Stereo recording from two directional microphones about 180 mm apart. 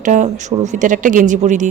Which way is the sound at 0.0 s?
45° right (ahead or behind).